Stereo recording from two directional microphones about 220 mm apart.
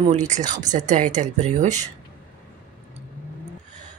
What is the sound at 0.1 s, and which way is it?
Speech, 35° right (ahead or behind).